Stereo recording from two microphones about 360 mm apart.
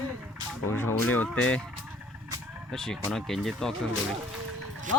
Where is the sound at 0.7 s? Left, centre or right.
Centre.